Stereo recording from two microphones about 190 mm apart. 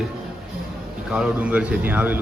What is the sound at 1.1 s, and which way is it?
Speech, 5° right (ahead or behind).